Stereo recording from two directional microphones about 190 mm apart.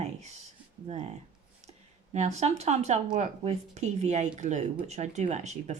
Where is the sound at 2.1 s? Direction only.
35° right (ahead or behind).